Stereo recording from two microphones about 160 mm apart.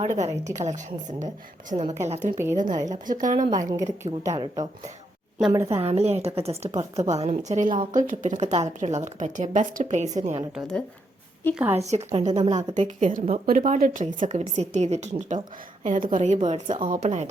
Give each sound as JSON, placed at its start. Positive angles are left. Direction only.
{"t": 0.0, "sound": "a woman's voice", "side_deg": -45}
{"t": 2.6, "sound": "speech", "side_deg": -25}
{"t": 3.1, "sound": "a woman's voice", "side_deg": -55}
{"t": 3.5, "sound": "speech", "side_deg": -20}
{"t": 5.8, "sound": "a woman's voice", "side_deg": -40}
{"t": 6.7, "sound": "speech", "side_deg": -25}
{"t": 7.1, "sound": "a woman's voice", "side_deg": -45}
{"t": 10.5, "sound": "a woman's voice", "side_deg": 5}
{"t": 11.5, "sound": "a woman's voice", "side_deg": -10}
{"t": 11.8, "sound": "a woman's voice", "side_deg": -45}